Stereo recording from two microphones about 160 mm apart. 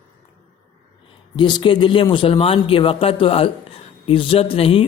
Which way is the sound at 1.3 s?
30° left (ahead or behind).